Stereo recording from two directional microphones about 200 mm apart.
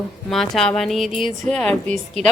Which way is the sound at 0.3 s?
Centre (ahead or behind).